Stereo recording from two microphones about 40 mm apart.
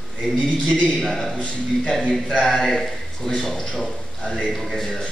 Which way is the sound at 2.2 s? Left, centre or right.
Centre.